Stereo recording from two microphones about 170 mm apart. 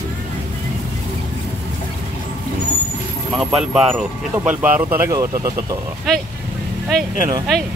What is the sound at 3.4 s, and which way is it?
Speech, centre (ahead or behind).